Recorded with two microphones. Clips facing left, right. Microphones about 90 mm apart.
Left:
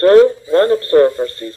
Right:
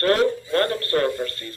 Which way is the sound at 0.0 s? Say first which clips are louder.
Left 11 dB; 25° left (ahead or behind).